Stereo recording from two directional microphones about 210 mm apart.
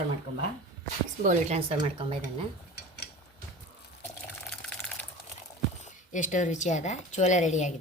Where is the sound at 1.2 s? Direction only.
30° right (ahead or behind).